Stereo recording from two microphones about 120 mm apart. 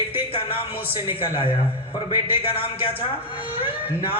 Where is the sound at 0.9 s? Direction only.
45° left (ahead or behind).